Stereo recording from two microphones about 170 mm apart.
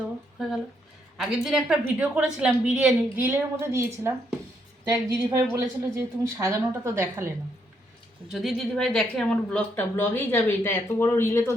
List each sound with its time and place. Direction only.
1.1 s a woman's voice: centre (ahead or behind)
8.3 s speech: centre (ahead or behind); by 11.5 s 15° left (ahead or behind)